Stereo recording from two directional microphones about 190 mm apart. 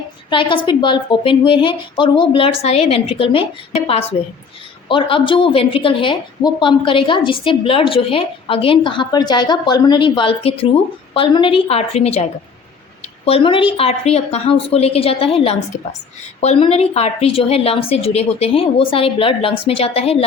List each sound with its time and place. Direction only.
0.3 s a woman's voice: 25° left (ahead or behind)
13.2 s a woman's voice: 30° left (ahead or behind)